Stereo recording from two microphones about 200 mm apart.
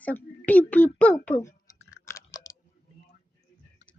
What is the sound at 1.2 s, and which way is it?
Chewing, 10° left (ahead or behind).